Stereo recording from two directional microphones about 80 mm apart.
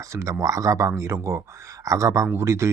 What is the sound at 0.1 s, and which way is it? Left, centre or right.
Speech, right.